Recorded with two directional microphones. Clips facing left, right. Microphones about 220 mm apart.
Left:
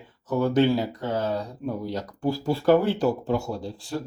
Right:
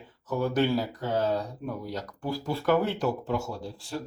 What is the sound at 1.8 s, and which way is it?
Speech, 25° left (ahead or behind).